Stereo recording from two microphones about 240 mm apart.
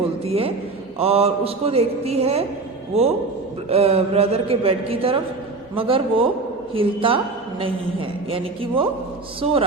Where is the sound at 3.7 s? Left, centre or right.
Right.